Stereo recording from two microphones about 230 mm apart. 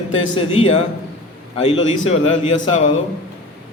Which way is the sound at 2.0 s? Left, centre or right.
Left.